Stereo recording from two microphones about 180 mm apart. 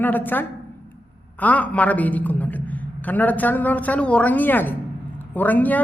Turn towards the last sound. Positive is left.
turn(degrees=10)  # may be behind; listen again after turning